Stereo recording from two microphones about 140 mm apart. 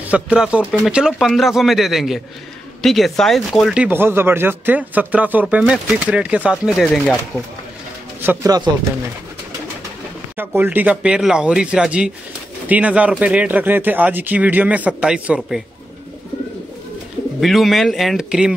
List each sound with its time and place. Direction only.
0.1 s a man's voice: 5° right (ahead or behind)
8.2 s speech: 15° right (ahead or behind)
8.5 s speech: 30° right (ahead or behind)
10.3 s speech: 15° right (ahead or behind)
17.4 s a man's voice: centre (ahead or behind)